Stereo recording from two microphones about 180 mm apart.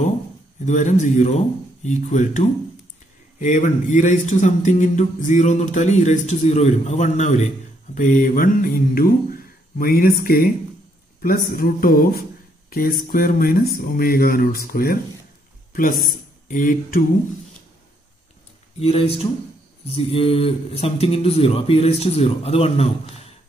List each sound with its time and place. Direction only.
0.7 s speech: 40° left (ahead or behind)
18.8 s speech: 35° left (ahead or behind)